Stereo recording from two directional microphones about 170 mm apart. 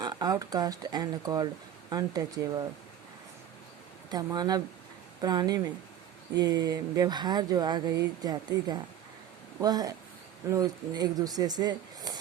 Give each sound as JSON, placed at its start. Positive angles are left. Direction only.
{"t": 0.0, "sound": "speech", "side_deg": -25}
{"t": 4.1, "sound": "speech", "side_deg": -20}